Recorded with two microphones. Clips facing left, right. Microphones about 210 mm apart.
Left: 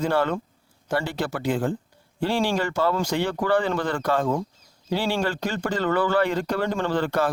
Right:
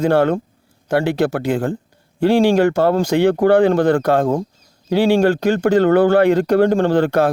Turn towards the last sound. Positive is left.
turn(degrees=-60)  # may be behind; listen again after turning